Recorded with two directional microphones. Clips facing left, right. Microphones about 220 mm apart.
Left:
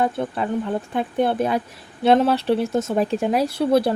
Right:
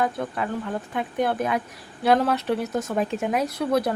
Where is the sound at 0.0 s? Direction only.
30° left (ahead or behind).